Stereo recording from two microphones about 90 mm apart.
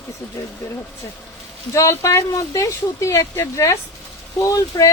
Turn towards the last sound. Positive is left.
turn(degrees=35)  # may be behind; listen again after turning